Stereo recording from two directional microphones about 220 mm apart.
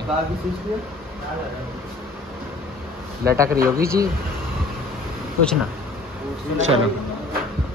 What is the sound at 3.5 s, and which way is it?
Speech, 40° right (ahead or behind).